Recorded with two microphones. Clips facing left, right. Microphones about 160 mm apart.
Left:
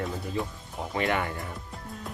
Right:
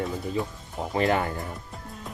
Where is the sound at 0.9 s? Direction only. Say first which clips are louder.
Right 4 dB; 35° right (ahead or behind).